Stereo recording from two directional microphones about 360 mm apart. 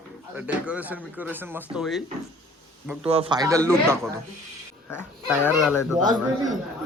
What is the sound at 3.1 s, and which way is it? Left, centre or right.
Speech, centre.